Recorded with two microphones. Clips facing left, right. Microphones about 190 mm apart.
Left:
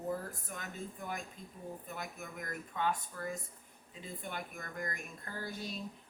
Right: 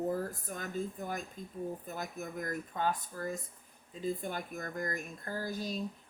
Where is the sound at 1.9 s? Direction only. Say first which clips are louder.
Right 5 dB; 40° right (ahead or behind).